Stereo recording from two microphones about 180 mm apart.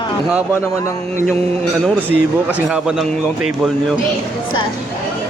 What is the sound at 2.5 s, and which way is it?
A man's voice, 5° right (ahead or behind).